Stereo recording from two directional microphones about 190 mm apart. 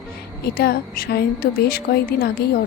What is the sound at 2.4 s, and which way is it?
Speech, 55° left (ahead or behind).